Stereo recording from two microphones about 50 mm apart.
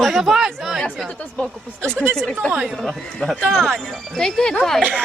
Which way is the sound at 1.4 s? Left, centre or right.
Centre.